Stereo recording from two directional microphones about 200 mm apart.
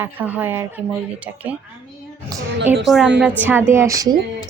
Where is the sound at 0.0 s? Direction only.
10° right (ahead or behind).